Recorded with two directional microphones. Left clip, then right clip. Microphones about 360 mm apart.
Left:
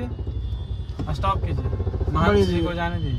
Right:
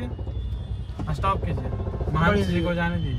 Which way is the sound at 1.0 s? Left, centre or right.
Left.